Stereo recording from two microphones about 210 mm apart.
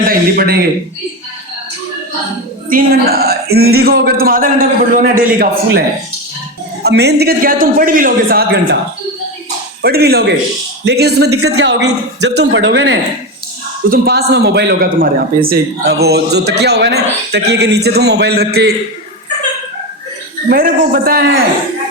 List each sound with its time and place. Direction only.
0.1 s a sound: 45° right (ahead or behind)
2.6 s a man's voice: 45° right (ahead or behind)
6.8 s a man's voice: 50° right (ahead or behind)
9.8 s a man's voice: 50° right (ahead or behind)
11.3 s a man's voice: 90° right; by 18.7 s 50° right (ahead or behind)
20.5 s a man's voice: 45° right (ahead or behind)